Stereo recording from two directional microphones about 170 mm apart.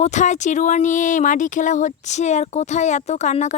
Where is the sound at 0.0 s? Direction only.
45° left (ahead or behind).